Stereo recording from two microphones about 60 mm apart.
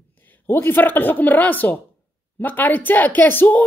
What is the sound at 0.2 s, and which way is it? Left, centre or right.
Speech, left.